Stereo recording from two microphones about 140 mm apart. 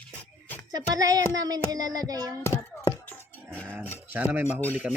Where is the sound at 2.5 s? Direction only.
15° left (ahead or behind).